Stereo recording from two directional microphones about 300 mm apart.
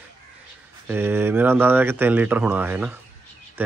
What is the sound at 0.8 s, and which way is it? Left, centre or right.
Speech, centre.